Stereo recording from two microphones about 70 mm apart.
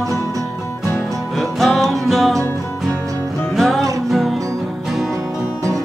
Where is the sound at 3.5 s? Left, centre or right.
Centre.